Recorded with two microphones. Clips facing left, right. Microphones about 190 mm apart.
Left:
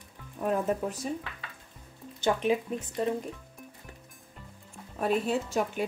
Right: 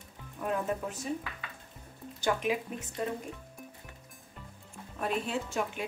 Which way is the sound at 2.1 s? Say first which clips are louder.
Left 4 dB; 25° left (ahead or behind).